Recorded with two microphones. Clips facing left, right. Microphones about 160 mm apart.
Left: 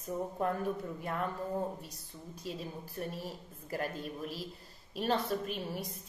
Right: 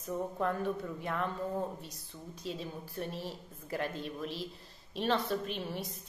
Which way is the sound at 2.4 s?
5° left (ahead or behind).